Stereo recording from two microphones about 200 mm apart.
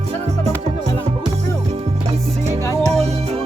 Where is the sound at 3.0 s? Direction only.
35° right (ahead or behind).